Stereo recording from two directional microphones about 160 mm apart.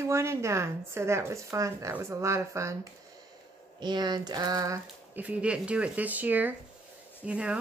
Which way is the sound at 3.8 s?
25° right (ahead or behind).